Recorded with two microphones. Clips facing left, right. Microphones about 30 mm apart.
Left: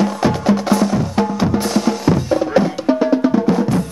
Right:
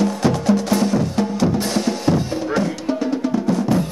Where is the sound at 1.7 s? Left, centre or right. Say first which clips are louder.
Left 3 dB; centre.